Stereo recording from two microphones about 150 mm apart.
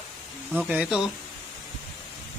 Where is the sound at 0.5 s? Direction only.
10° right (ahead or behind).